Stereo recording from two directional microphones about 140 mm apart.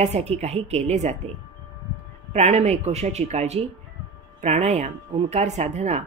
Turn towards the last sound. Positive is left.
turn(degrees=-55)  # may be behind; listen again after turning